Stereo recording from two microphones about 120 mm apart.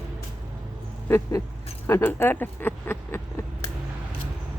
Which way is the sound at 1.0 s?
20° left (ahead or behind).